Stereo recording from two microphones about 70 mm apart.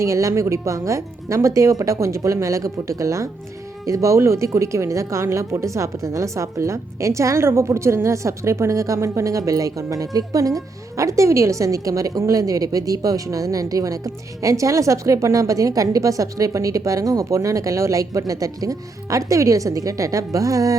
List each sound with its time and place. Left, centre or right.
0.0 s speech: right